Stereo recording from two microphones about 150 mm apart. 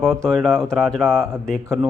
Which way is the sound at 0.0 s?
5° left (ahead or behind).